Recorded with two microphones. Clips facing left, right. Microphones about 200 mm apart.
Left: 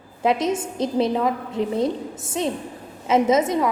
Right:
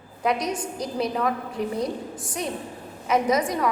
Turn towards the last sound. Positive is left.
turn(degrees=25)  # may be behind; listen again after turning